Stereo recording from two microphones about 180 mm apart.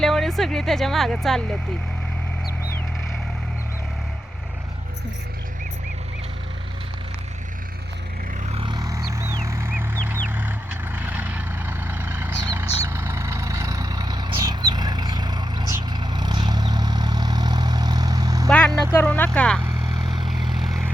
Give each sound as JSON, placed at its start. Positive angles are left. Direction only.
{"t": 0.0, "sound": "speech", "side_deg": 0}
{"t": 8.4, "sound": "vehicle", "side_deg": -30}
{"t": 18.4, "sound": "vehicle", "side_deg": 5}
{"t": 19.9, "sound": "vehicle", "side_deg": -25}
{"t": 20.5, "sound": "vehicle", "side_deg": 0}